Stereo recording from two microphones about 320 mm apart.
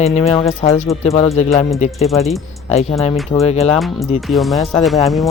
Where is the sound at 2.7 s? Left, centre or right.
Centre.